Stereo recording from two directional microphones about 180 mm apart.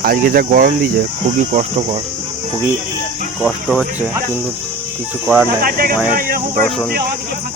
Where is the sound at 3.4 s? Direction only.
5° right (ahead or behind).